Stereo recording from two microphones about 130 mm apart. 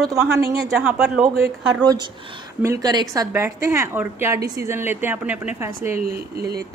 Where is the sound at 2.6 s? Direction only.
25° right (ahead or behind).